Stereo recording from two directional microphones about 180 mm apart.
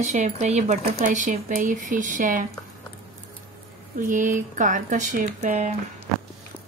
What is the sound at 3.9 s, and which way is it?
Speech, 45° right (ahead or behind).